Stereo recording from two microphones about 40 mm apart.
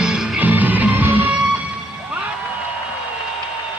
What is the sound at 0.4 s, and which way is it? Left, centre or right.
Music, right.